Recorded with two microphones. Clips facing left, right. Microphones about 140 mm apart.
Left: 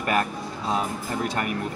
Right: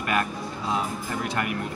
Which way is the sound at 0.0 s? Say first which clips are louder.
Left 2 dB; 40° left (ahead or behind).